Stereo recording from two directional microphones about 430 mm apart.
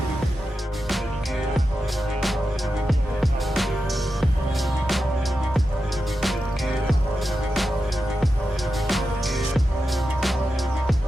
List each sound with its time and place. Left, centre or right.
3.2 s music: centre
8.9 s music: centre